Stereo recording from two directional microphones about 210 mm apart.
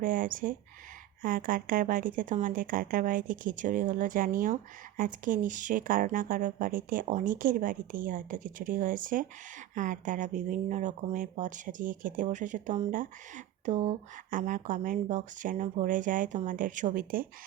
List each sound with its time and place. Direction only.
0.0 s speech: 40° right (ahead or behind)